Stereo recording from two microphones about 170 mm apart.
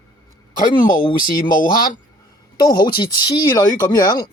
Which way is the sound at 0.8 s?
55° left (ahead or behind).